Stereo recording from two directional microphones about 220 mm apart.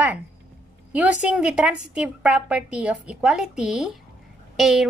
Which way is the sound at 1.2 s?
5° right (ahead or behind).